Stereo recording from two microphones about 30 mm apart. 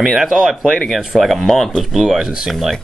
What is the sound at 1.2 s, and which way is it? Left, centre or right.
Speech, centre.